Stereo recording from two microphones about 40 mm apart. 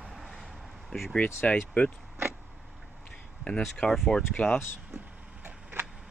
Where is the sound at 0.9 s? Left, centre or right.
Left.